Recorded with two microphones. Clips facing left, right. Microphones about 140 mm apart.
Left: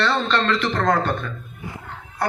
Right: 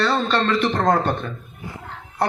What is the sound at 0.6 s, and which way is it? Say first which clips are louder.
Speech: right 2 dB; 15° right (ahead or behind).